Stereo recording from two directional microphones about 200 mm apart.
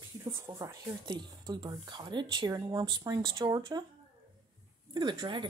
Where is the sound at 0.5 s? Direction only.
15° right (ahead or behind).